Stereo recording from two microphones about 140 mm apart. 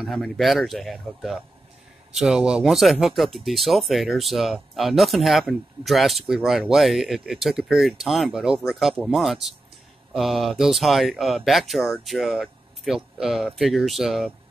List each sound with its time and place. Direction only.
0.0 s speech: centre (ahead or behind)